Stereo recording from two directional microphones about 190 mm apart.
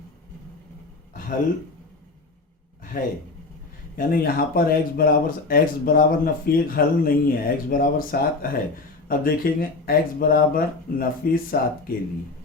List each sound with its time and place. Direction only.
2.9 s speech: 45° left (ahead or behind)